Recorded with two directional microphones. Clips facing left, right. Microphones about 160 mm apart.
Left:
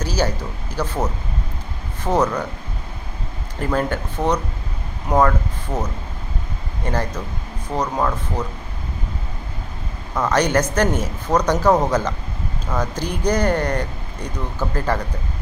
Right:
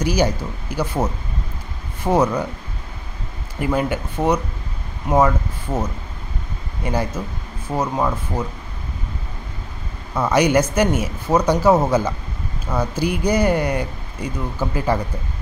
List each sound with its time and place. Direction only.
0.0 s speech: 10° right (ahead or behind)
3.5 s speech: 10° right (ahead or behind)
10.1 s speech: 10° right (ahead or behind)